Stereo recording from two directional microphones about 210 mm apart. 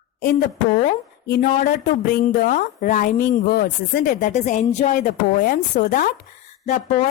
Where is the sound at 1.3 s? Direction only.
45° left (ahead or behind).